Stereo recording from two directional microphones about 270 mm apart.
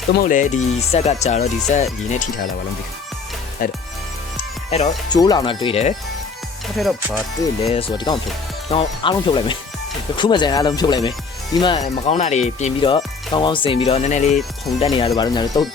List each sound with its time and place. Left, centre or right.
0.3 s speech: left
3.6 s speech: left
4.7 s speech: centre
6.7 s speech: centre
7.6 s speech: left